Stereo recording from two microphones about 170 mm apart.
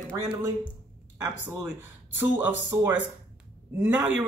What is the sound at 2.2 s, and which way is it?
Speech, 10° right (ahead or behind).